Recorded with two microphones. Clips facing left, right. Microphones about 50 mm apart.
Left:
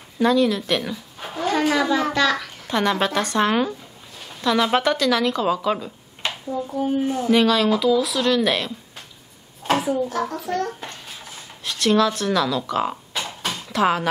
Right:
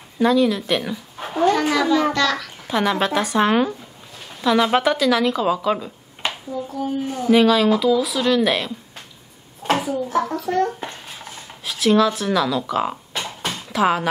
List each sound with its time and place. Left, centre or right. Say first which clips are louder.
0.2 s speech: right 1 dB; centre
1.7 s a child's voice: right 2 dB; centre
2.7 s a woman's voice: right 1 dB; centre
6.5 s speech: left 4 dB; centre
7.2 s a woman's voice: right 4 dB; centre
9.6 s a sound: right 1 dB; centre
10.1 s a child's voice: right 4 dB; right
11.6 s speech: right 2 dB; centre
13.4 s a sound: right 1 dB; centre